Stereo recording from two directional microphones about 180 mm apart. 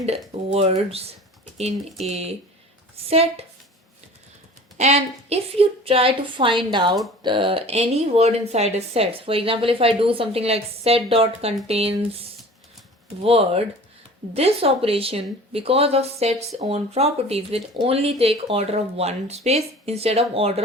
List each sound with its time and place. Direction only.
0.3 s speech: 35° right (ahead or behind)
4.8 s speech: 35° right (ahead or behind)
13.2 s speech: 30° right (ahead or behind)